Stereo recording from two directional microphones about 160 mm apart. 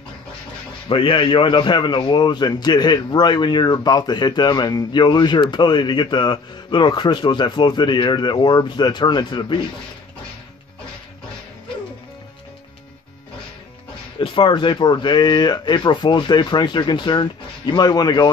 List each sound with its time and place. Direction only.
0.8 s a man's voice: 35° left (ahead or behind)
14.1 s a man's voice: 30° left (ahead or behind)